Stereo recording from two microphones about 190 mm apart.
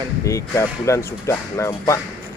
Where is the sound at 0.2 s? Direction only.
15° left (ahead or behind).